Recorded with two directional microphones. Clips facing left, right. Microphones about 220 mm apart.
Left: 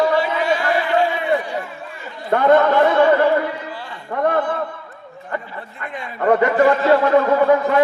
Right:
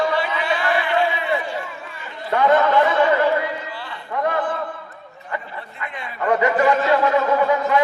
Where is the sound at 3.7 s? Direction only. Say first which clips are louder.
Left 1 dB; 45° left (ahead or behind).